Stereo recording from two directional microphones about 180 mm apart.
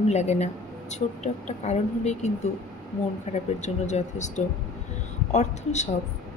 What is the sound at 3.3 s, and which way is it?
Speech, 40° left (ahead or behind).